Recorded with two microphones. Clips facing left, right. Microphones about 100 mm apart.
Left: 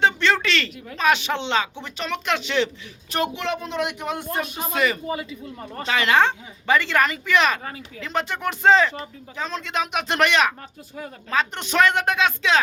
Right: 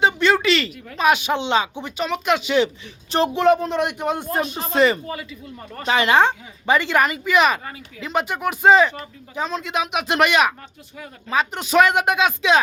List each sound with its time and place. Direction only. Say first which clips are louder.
0.0 s a sound: right 3 dB; 10° right (ahead or behind)
0.9 s speech: right 3 dB; 15° right (ahead or behind)
3.1 s speech: right 5 dB; 30° right (ahead or behind)
3.4 s speech: right 8 dB; 45° right (ahead or behind)
4.7 s speech: right 6 dB; 30° right (ahead or behind)
5.0 s speech: left 3 dB; 20° left (ahead or behind)
5.8 s speech: right 3 dB; 20° right (ahead or behind)